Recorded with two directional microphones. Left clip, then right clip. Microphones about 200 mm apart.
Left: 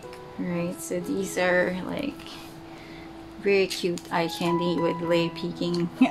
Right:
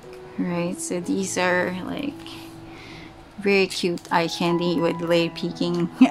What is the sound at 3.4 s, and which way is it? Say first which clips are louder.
Speech: right 3 dB; 25° right (ahead or behind).